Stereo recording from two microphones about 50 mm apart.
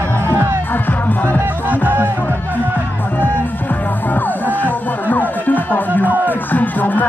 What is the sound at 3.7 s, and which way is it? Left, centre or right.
Music, left.